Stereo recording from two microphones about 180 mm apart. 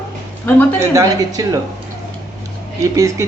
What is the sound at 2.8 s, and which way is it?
Speech, 15° right (ahead or behind).